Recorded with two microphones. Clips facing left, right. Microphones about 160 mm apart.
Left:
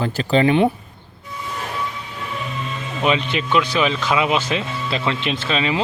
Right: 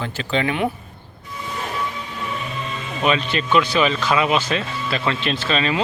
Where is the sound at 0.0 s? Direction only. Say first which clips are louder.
Left 6 dB; 40° left (ahead or behind).